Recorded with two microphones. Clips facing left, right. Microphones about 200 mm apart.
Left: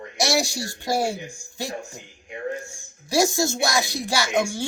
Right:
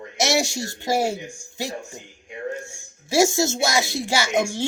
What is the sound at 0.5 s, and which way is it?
Speech, 45° right (ahead or behind).